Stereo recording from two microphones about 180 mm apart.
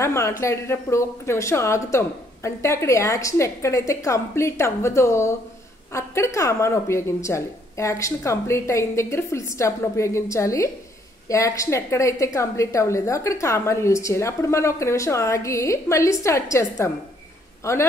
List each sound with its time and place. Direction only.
0.0 s a woman's voice: 15° left (ahead or behind)